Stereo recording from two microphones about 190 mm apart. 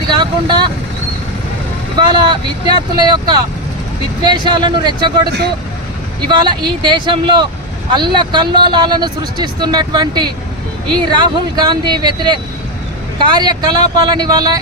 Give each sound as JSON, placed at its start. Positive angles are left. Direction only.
{"t": 0.1, "sound": "vehicle", "side_deg": -20}
{"t": 2.0, "sound": "speech", "side_deg": -25}